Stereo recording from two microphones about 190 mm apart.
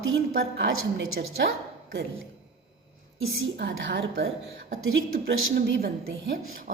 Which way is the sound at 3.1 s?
80° right.